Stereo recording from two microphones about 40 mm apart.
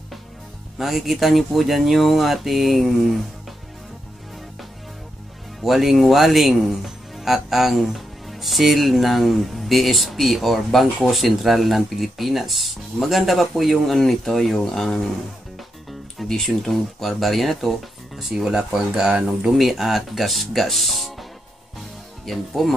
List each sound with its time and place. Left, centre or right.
0.7 s speech: centre
5.6 s speech: centre
16.3 s speech: centre
18.1 s speech: centre
19.0 s speech: right
19.6 s speech: centre